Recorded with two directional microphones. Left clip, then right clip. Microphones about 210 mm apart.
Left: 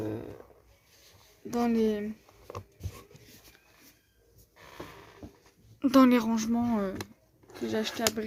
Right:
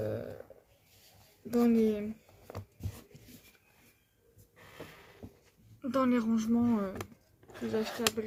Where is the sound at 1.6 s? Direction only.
35° left (ahead or behind).